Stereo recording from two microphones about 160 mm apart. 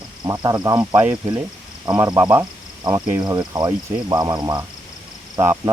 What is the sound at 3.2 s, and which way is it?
Speech, 25° right (ahead or behind).